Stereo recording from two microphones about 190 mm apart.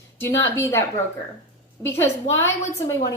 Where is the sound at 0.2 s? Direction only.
15° left (ahead or behind).